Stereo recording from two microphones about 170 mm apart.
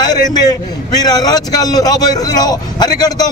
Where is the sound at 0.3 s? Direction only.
25° left (ahead or behind).